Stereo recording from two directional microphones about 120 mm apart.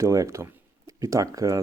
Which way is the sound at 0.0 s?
25° right (ahead or behind).